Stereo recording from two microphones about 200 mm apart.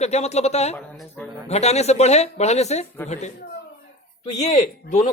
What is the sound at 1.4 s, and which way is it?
Speech, 35° left (ahead or behind).